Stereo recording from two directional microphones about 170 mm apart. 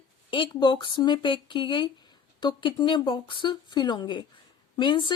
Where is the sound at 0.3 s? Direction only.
30° left (ahead or behind).